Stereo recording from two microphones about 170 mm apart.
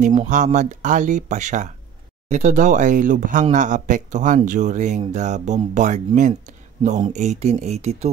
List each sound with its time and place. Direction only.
0.0 s speech: 45° right (ahead or behind)